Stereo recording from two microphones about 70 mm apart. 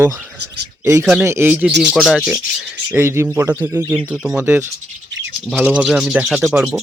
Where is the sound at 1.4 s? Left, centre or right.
Right.